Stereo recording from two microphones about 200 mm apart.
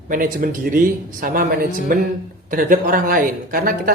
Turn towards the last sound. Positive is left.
turn(degrees=-45)  # may be behind; listen again after turning